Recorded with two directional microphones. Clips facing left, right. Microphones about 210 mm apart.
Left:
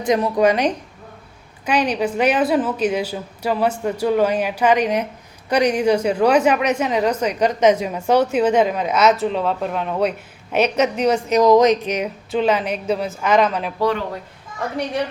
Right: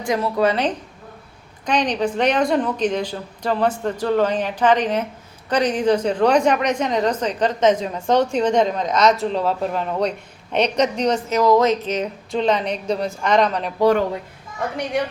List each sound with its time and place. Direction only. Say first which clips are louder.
0.0 s a woman's voice: left 3 dB; 20° left (ahead or behind); by 13.7 s 5° left (ahead or behind)